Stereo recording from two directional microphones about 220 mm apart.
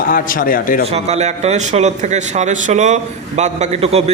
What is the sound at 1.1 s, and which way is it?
A man's voice, 30° right (ahead or behind).